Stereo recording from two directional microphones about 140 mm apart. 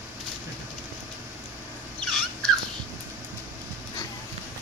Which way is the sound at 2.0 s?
Centre (ahead or behind).